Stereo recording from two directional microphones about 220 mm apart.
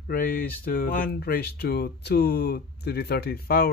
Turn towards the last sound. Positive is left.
turn(degrees=45)  # may be behind; listen again after turning